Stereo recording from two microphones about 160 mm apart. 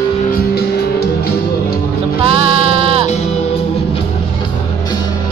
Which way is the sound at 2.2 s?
35° right (ahead or behind).